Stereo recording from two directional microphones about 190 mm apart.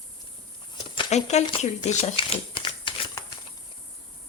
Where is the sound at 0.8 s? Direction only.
25° left (ahead or behind).